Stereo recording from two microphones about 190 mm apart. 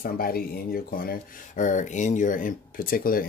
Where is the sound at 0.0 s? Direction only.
50° left (ahead or behind).